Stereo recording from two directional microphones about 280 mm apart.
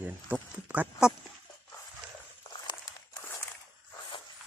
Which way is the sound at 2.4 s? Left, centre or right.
Centre.